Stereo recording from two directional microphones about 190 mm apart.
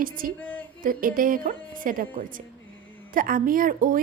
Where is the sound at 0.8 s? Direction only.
45° right (ahead or behind).